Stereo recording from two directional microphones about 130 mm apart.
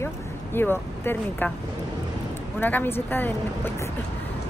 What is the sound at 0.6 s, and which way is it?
Speech, 15° left (ahead or behind).